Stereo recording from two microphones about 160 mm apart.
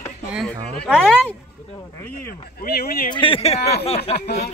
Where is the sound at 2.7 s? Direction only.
75° left (ahead or behind).